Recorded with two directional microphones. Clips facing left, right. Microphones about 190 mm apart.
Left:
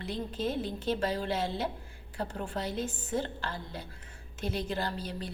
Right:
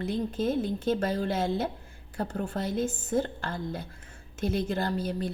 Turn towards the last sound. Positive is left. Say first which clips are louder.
# right 6 dB
turn(degrees=-45)  # may be behind; listen again after turning